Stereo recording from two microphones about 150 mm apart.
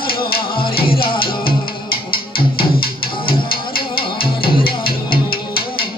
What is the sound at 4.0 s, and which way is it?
Music, 35° left (ahead or behind).